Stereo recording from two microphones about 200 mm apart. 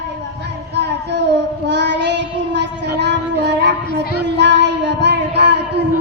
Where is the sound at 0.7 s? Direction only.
55° right (ahead or behind).